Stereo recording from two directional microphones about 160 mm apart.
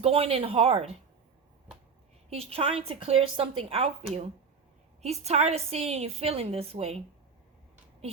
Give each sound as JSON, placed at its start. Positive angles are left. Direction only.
{"t": 0.0, "sound": "a woman's voice", "side_deg": -35}
{"t": 2.3, "sound": "a woman's voice", "side_deg": -40}
{"t": 5.0, "sound": "a woman's voice", "side_deg": -40}